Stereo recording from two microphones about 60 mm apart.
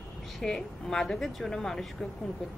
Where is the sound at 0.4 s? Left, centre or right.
Centre.